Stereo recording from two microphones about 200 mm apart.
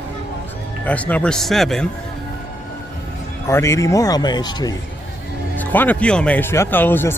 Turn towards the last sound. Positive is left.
turn(degrees=10)  # may be behind; listen again after turning